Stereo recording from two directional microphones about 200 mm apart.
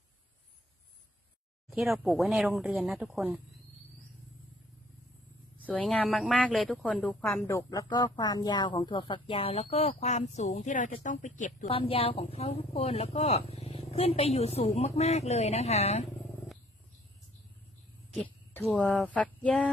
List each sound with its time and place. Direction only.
1.7 s speech: centre (ahead or behind)
5.5 s a woman's voice: 5° left (ahead or behind); by 11.7 s 40° left (ahead or behind)
11.7 s speech: 25° left (ahead or behind)
18.2 s speech: 10° left (ahead or behind)